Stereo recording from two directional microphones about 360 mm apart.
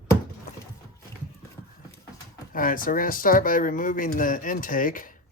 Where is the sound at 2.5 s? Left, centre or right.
Left.